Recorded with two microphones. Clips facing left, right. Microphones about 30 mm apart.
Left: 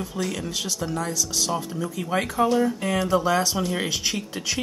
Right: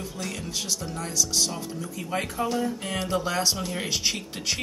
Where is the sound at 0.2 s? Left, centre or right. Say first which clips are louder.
Left 7 dB; left.